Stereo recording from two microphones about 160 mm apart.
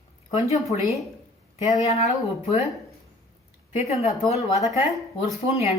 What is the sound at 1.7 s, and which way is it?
Speech, 40° left (ahead or behind).